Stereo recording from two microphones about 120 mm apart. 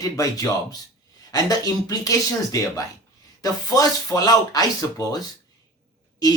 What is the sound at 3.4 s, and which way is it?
Speech, 30° left (ahead or behind).